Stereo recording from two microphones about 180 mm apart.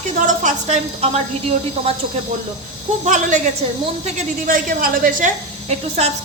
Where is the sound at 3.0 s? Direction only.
45° right (ahead or behind).